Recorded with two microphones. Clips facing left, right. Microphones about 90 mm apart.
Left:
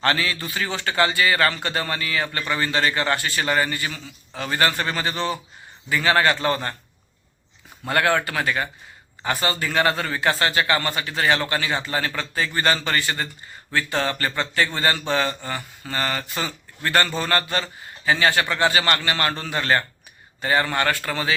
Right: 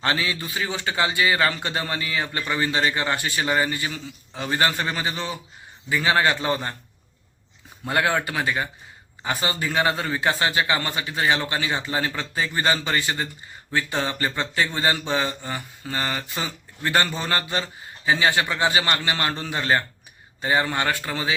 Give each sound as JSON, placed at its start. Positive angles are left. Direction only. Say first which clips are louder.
{"t": 0.0, "sound": "speech", "louder": "left 2 dB", "side_deg": -15}
{"t": 7.9, "sound": "speech", "louder": "left 2 dB", "side_deg": -10}